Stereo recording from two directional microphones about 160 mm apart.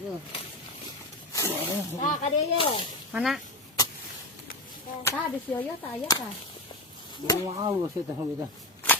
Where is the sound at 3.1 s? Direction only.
Centre (ahead or behind).